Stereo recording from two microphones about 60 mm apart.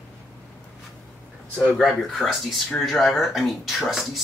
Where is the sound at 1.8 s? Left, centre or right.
Centre.